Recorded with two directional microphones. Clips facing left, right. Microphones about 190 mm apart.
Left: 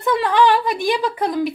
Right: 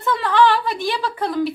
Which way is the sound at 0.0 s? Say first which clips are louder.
Left 1 dB; 15° left (ahead or behind).